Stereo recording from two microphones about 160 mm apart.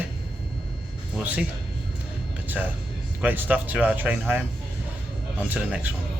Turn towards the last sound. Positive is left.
turn(degrees=-10)  # may be behind; listen again after turning